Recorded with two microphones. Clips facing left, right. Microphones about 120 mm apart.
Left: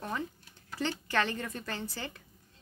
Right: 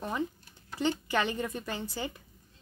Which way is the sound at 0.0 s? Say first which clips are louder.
Right 3 dB; 15° right (ahead or behind).